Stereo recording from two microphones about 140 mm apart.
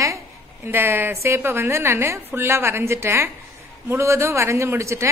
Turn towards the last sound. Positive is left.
turn(degrees=-20)  # may be behind; listen again after turning